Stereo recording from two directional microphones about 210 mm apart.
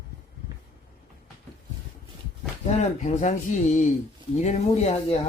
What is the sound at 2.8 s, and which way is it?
Speech, 35° left (ahead or behind).